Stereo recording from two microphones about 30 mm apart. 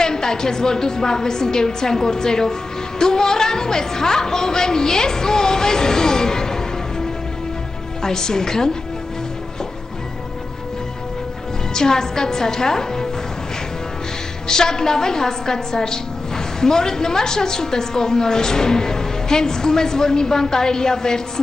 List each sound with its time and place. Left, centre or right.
0.0 s a woman's voice: left
8.0 s a woman's voice: centre
11.7 s a woman's voice: left
14.5 s a woman's voice: left